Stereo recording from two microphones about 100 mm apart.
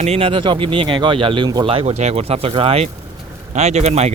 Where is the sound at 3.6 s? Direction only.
90° right.